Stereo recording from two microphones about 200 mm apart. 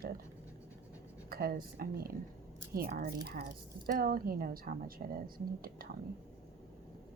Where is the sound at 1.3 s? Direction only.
50° right (ahead or behind).